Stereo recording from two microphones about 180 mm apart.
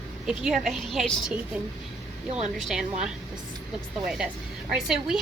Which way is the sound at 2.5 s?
5° right (ahead or behind).